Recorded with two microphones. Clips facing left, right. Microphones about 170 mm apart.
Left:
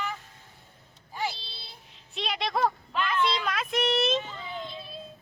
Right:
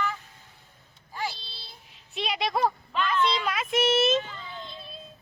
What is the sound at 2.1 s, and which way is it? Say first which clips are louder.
Speech: right 2 dB; centre (ahead or behind).